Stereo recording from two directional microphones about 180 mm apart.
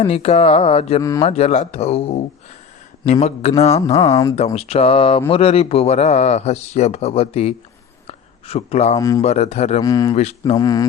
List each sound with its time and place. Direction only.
0.0 s a man's voice: 35° left (ahead or behind)
4.1 s speech: 15° left (ahead or behind)
4.5 s a man's voice: 35° left (ahead or behind)
8.0 s a sound: 35° left (ahead or behind)
9.0 s speech: 20° left (ahead or behind)
9.2 s a man's voice: 35° left (ahead or behind)
9.8 s speech: 20° left (ahead or behind)
10.2 s a man's voice: 40° left (ahead or behind)
10.5 s speech: 20° left (ahead or behind)